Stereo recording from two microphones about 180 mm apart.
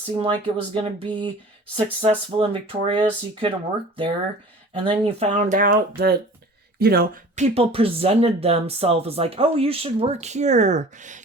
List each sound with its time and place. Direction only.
0.2 s speech: 30° right (ahead or behind)
4.7 s speech: 30° right (ahead or behind); by 7.1 s 55° right (ahead or behind)
7.3 s speech: 35° right (ahead or behind)